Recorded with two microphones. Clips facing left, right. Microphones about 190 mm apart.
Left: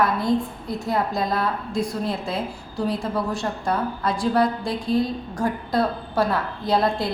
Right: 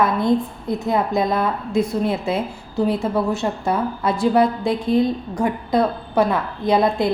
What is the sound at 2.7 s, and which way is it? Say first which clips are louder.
A woman's voice: right 5 dB; 25° right (ahead or behind).